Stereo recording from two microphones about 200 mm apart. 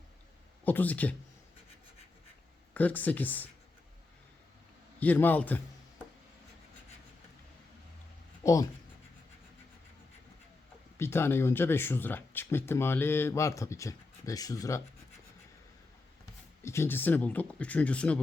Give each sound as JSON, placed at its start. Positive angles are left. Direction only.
{"t": 0.6, "sound": "speech", "side_deg": 10}
{"t": 2.7, "sound": "speech", "side_deg": 10}
{"t": 4.9, "sound": "speech", "side_deg": 10}
{"t": 8.4, "sound": "speech", "side_deg": 15}
{"t": 10.9, "sound": "speech", "side_deg": 10}
{"t": 16.6, "sound": "speech", "side_deg": 15}